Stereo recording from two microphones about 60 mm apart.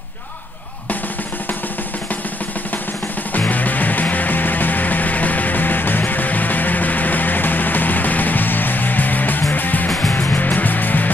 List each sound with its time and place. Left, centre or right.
3.3 s music: left
9.8 s music: centre
10.1 s music: left